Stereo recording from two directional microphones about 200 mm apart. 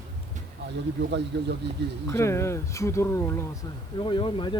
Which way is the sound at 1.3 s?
60° right (ahead or behind).